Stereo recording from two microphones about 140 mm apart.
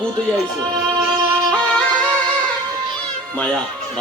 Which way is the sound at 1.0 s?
90° left.